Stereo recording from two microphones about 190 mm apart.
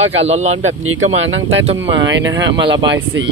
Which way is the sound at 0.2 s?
35° right (ahead or behind).